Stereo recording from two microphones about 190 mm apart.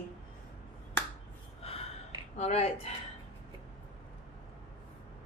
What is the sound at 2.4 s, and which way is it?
Speech, 35° left (ahead or behind).